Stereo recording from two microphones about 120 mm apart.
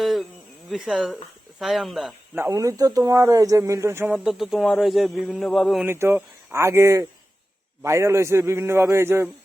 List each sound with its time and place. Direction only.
0.0 s a sound: centre (ahead or behind)
0.7 s speech: centre (ahead or behind)
2.3 s speech: 25° right (ahead or behind)
4.1 s speech: 5° right (ahead or behind)
5.8 s speech: 20° right (ahead or behind)